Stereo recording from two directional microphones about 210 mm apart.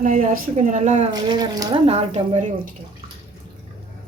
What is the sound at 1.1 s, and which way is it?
Speech, 20° right (ahead or behind).